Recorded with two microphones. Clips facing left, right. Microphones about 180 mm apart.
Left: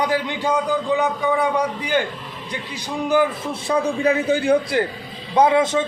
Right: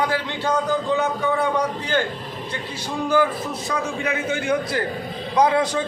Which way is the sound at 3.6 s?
30° left (ahead or behind).